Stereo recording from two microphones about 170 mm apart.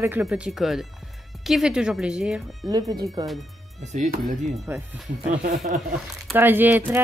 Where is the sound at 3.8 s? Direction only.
45° right (ahead or behind).